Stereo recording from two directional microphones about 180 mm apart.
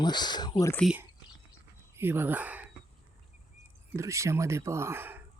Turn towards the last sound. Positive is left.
turn(degrees=-10)  # may be behind; listen again after turning